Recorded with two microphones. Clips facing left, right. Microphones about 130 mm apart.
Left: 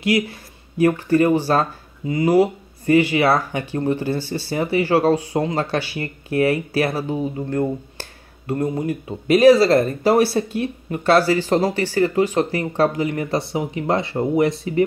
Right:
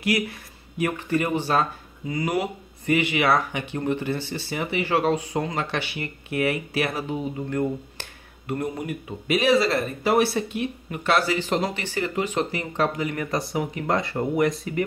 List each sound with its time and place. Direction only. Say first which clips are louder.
0.0 s speech: left 5 dB; 30° left (ahead or behind)